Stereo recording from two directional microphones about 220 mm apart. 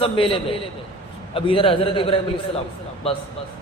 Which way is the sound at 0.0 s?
25° left (ahead or behind).